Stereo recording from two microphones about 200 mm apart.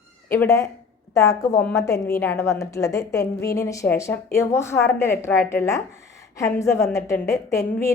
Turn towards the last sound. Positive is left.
turn(degrees=15)  # may be behind; listen again after turning